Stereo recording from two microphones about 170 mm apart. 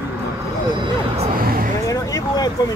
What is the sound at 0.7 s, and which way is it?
Speech, 30° right (ahead or behind).